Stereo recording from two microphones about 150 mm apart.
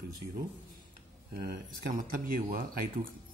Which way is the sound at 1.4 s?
80° right.